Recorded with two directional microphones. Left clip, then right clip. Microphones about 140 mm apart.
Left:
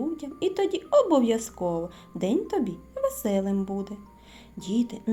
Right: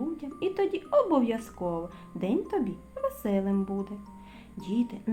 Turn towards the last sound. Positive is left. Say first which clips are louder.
# left 3 dB
turn(degrees=30)  # may be behind; listen again after turning